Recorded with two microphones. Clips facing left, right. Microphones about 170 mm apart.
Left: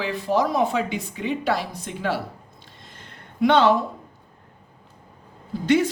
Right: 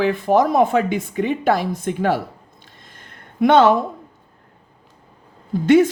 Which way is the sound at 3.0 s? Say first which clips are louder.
Right 3 dB; 50° right (ahead or behind).